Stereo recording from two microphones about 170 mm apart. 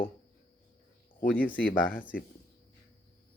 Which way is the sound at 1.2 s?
55° left (ahead or behind).